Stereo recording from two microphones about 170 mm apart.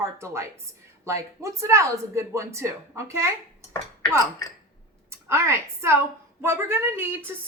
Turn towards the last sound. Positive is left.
turn(degrees=-15)  # may be behind; listen again after turning